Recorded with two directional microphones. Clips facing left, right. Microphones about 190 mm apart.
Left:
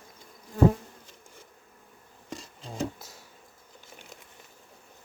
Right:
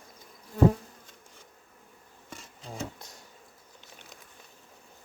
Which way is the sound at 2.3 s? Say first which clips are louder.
Left 4 dB; 35° left (ahead or behind).